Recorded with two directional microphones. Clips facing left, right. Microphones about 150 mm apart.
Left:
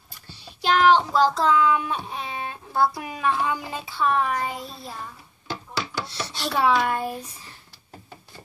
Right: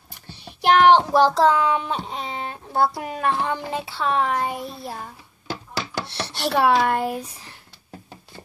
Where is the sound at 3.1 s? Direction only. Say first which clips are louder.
Right 1 dB; 55° right (ahead or behind).